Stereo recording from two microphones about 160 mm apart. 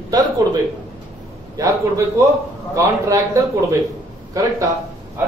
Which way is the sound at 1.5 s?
20° right (ahead or behind).